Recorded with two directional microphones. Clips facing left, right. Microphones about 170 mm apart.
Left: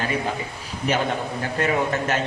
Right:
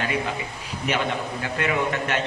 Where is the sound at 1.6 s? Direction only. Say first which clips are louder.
Left 2 dB; 40° left (ahead or behind).